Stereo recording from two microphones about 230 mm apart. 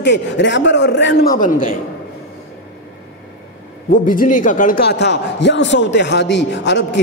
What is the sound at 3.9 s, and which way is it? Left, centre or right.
A man's voice, left.